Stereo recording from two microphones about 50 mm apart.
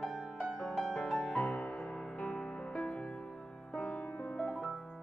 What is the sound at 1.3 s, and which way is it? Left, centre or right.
Music, left.